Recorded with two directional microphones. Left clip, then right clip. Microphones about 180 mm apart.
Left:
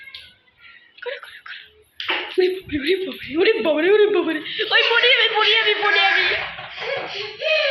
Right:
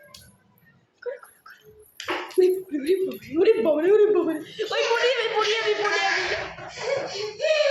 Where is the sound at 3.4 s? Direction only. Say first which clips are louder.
Left 2 dB; 10° right (ahead or behind).